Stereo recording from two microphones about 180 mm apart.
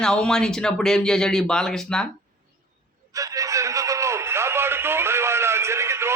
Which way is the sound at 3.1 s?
20° right (ahead or behind).